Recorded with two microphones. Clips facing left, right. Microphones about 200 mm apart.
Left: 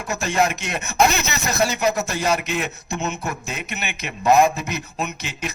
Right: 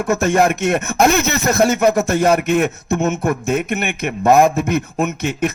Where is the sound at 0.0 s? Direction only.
55° right (ahead or behind).